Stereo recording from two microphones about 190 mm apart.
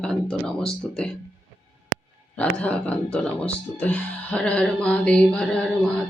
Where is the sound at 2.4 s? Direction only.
5° left (ahead or behind).